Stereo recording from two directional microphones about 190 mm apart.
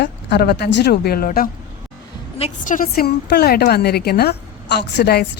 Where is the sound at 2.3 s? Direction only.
40° left (ahead or behind).